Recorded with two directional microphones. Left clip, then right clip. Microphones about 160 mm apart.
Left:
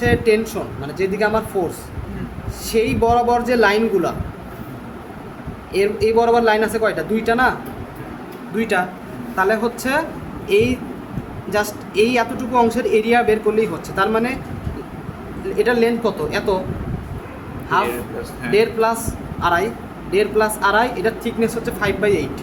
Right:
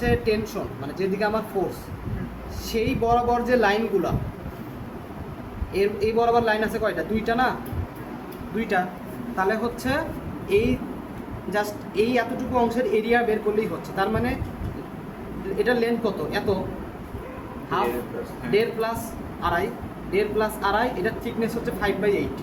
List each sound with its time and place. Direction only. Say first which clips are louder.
0.0 s a man's voice: left 7 dB; 50° left (ahead or behind)
2.6 s a man's voice: left 6 dB; 50° left (ahead or behind)
5.7 s a man's voice: left 6 dB; 50° left (ahead or behind)
8.5 s a man's voice: left 5 dB; 50° left (ahead or behind)
11.5 s speech: left 6 dB; 55° left (ahead or behind)
15.5 s speech: left 6 dB; 55° left (ahead or behind)
17.7 s speech: left 6 dB; 55° left (ahead or behind)